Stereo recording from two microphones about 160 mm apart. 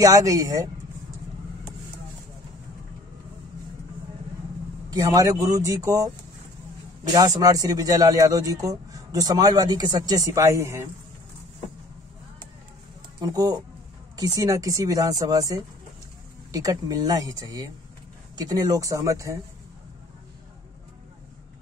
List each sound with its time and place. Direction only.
0.0 s speech: 20° right (ahead or behind)
4.9 s speech: 25° right (ahead or behind)
7.1 s speech: 20° right (ahead or behind)
13.2 s speech: 25° right (ahead or behind)